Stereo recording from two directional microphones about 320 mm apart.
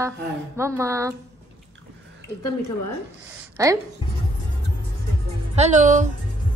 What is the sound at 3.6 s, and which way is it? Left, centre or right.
Speech, centre.